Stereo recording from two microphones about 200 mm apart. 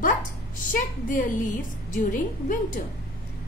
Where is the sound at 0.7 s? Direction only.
40° left (ahead or behind).